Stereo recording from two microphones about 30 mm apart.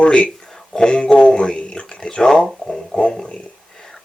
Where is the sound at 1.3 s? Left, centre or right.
Left.